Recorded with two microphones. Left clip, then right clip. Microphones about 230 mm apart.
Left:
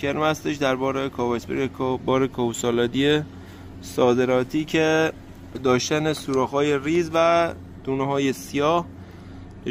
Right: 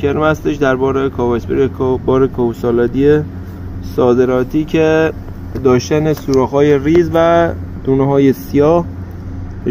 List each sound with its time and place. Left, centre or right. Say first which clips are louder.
0.0 s speech: right 9 dB; left
1.3 s speech: right 11 dB; left
6.2 s speech: right 10 dB; left; by 8.2 s centre